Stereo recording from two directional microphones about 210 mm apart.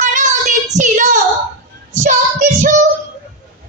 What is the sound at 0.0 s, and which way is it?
Child singing, 35° right (ahead or behind).